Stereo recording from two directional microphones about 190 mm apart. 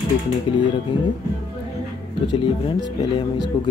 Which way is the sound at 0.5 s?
25° left (ahead or behind).